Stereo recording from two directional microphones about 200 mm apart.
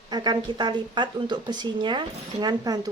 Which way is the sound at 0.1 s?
20° right (ahead or behind).